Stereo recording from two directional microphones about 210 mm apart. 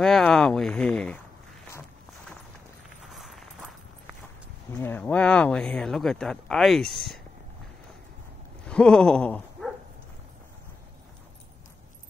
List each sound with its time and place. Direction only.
0.0 s speech: centre (ahead or behind)
3.2 s a sound: centre (ahead or behind)
4.7 s speech: 10° left (ahead or behind)
8.6 s speech: 5° left (ahead or behind)